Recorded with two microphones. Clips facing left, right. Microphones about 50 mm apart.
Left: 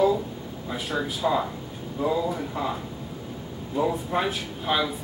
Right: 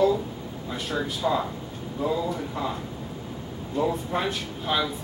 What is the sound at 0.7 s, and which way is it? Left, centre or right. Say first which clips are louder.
Speech: left 1 dB; centre.